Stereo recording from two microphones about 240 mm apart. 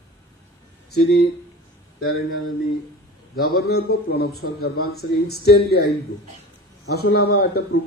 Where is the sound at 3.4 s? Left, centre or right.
Left.